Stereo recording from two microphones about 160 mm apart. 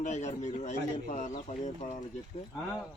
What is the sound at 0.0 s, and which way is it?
Speech, 45° left (ahead or behind).